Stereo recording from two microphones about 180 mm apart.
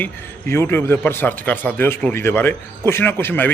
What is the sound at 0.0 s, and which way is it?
A man's voice, 15° left (ahead or behind).